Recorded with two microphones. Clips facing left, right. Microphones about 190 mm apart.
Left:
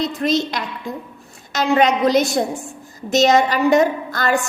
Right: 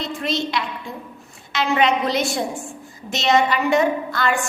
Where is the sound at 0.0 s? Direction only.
40° left (ahead or behind).